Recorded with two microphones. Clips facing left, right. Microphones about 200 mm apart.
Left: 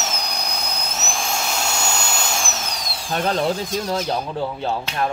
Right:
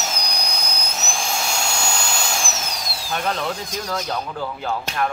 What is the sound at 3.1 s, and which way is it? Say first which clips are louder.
Speech: left 4 dB; 35° left (ahead or behind).